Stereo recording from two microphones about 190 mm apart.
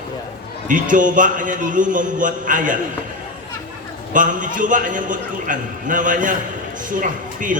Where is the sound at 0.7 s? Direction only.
45° right (ahead or behind).